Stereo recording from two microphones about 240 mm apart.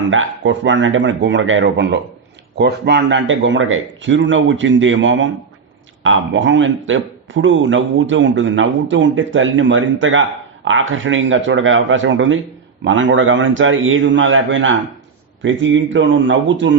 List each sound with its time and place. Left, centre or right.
0.1 s speech: right